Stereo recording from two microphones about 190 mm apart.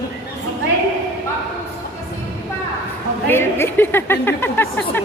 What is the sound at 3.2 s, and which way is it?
Speech, 10° left (ahead or behind).